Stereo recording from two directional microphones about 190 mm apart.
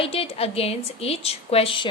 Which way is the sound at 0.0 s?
30° left (ahead or behind).